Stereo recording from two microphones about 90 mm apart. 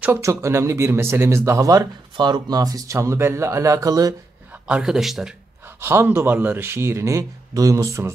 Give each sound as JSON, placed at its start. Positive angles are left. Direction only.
{"t": 0.2, "sound": "speech", "side_deg": -30}
{"t": 2.1, "sound": "speech", "side_deg": -55}
{"t": 4.6, "sound": "a man's voice", "side_deg": -10}
{"t": 5.8, "sound": "speech", "side_deg": -30}